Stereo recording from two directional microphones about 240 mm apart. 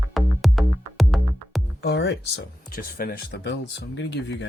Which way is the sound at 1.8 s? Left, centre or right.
Left.